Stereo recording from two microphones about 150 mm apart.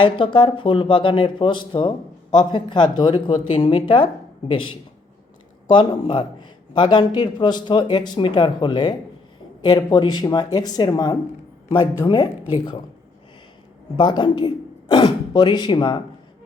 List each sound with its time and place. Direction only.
0.0 s a man's voice: 35° left (ahead or behind)
5.6 s a man's voice: 30° left (ahead or behind)
13.9 s a man's voice: 30° left (ahead or behind)